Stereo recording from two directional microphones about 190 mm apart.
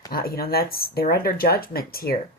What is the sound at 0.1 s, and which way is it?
Speech, 50° left (ahead or behind).